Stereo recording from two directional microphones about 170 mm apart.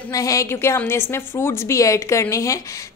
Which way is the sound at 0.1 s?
20° left (ahead or behind).